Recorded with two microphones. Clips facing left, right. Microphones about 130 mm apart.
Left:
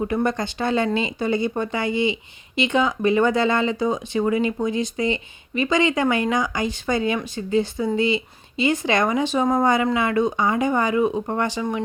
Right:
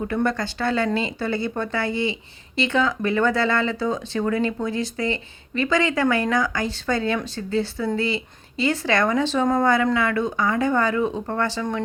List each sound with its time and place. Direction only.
0.0 s speech: 20° left (ahead or behind)